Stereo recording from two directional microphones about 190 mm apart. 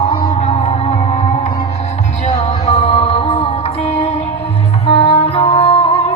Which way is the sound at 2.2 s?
35° left (ahead or behind).